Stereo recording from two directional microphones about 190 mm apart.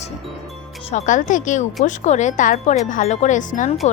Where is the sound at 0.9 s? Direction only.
40° left (ahead or behind).